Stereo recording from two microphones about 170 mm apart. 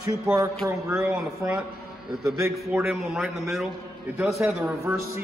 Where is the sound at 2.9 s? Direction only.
Centre (ahead or behind).